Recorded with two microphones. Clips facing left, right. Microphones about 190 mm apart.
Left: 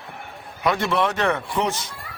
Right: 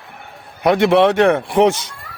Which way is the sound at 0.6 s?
70° right (ahead or behind).